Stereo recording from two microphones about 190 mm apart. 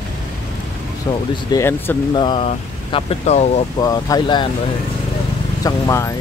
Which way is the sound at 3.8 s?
20° left (ahead or behind).